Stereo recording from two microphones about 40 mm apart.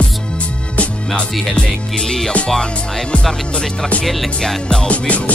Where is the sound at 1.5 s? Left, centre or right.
Centre.